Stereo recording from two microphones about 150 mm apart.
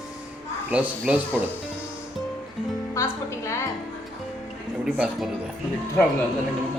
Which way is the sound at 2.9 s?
20° left (ahead or behind).